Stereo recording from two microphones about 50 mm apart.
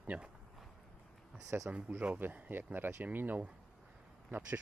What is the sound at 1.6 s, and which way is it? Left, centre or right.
Speech, right.